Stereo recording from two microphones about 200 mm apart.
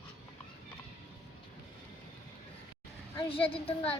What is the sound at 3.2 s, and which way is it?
Speech, 25° left (ahead or behind).